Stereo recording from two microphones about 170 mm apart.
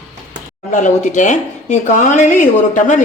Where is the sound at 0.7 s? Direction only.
45° left (ahead or behind).